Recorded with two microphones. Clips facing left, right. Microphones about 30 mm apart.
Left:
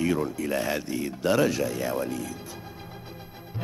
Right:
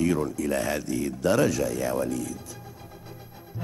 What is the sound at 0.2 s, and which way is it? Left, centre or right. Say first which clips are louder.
Speech: right 1 dB; left.